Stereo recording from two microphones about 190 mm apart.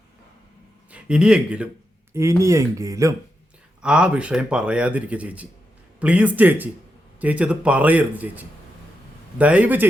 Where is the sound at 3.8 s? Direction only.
5° right (ahead or behind).